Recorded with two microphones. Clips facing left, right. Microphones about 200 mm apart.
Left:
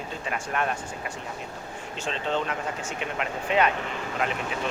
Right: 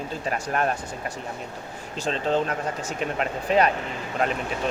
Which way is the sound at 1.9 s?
40° right (ahead or behind).